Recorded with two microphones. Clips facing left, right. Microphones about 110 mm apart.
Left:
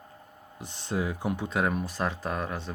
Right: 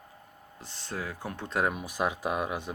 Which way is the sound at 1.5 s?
Centre (ahead or behind).